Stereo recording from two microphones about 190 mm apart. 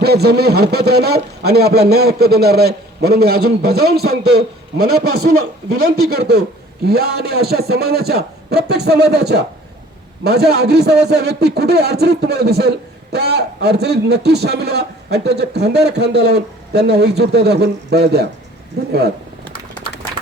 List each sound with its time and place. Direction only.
0.0 s a man's voice: 60° right (ahead or behind)